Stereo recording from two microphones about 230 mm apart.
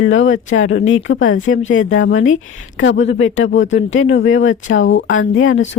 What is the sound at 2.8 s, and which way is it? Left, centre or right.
Speech, left.